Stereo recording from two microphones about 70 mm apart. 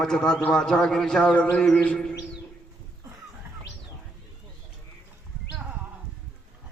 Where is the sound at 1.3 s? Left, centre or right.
Centre.